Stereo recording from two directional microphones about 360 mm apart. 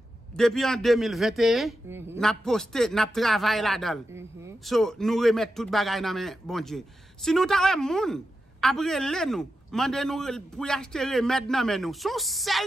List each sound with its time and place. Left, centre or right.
0.4 s a man's voice: centre